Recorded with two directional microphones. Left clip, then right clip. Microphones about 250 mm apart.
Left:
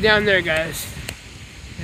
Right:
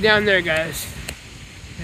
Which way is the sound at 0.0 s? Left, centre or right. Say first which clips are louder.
Even; centre.